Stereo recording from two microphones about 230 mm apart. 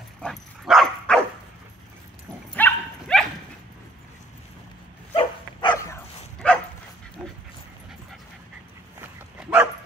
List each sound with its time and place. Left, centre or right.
0.2 s dog: centre
2.5 s bow-wow: centre
5.1 s dog: centre
6.4 s dog: centre
9.0 s dog: centre